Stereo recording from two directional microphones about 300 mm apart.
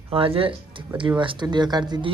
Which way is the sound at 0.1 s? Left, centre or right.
Centre.